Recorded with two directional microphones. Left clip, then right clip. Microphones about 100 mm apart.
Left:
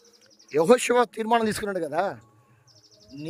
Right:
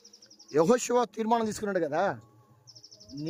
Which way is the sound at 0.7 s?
15° left (ahead or behind).